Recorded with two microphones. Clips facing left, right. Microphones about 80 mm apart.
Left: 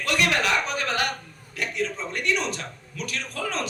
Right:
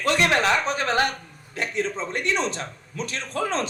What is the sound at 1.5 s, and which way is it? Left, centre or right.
A man's voice, right.